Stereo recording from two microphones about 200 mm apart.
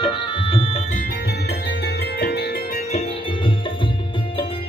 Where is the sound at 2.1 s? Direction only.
55° left (ahead or behind).